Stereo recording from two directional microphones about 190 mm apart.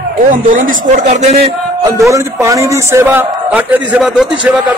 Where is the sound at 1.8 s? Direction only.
15° right (ahead or behind).